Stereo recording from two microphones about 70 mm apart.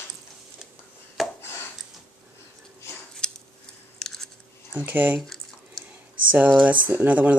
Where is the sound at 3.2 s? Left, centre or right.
Centre.